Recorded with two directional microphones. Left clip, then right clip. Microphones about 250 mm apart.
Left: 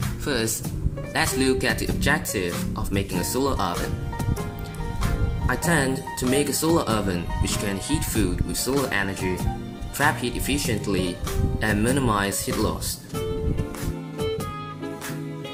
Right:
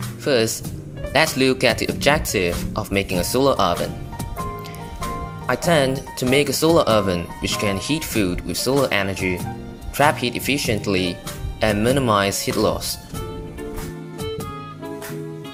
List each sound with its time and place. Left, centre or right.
0.3 s speech: centre
5.5 s speech: right